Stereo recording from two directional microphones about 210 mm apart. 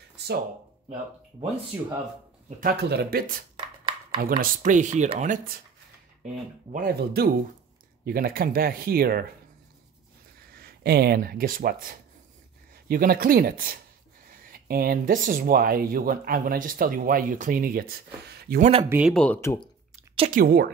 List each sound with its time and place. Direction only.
2.6 s speech: 50° right (ahead or behind)
3.5 s a sound: 20° right (ahead or behind)
4.4 s speech: 35° right (ahead or behind)
10.5 s speech: 50° right (ahead or behind)
18.6 s speech: 30° right (ahead or behind)
18.9 s speech: 5° right (ahead or behind)
19.1 s speech: 10° left (ahead or behind)
20.2 s speech: 40° right (ahead or behind)